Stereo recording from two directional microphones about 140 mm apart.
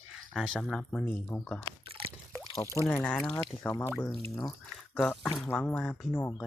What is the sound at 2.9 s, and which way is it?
Speech, 5° left (ahead or behind).